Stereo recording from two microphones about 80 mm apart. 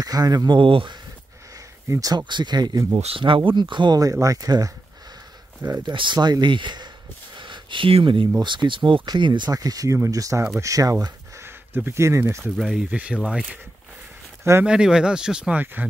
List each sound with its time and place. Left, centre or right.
0.0 s speech: right
1.9 s speech: right
2.2 s speech: right
4.0 s speech: right
5.9 s speech: right
7.3 s a sound: right
8.4 s speech: right
9.5 s speech: right
11.4 s speech: right
12.5 s speech: centre
12.9 s speech: centre
13.2 s speech: centre
14.6 s speech: centre